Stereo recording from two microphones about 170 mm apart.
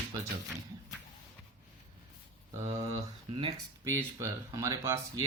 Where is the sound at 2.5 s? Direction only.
15° right (ahead or behind).